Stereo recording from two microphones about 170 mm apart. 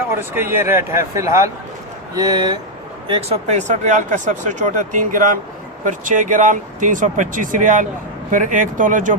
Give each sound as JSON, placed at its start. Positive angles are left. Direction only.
{"t": 0.2, "sound": "speech", "side_deg": -15}
{"t": 3.1, "sound": "speech", "side_deg": -35}